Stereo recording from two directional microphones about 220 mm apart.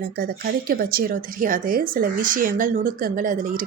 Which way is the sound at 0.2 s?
40° right (ahead or behind).